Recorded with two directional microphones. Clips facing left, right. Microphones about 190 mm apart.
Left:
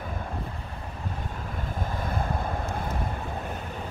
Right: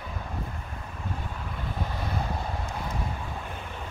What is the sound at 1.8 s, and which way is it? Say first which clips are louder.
Vehicle: left 2 dB; 50° left (ahead or behind).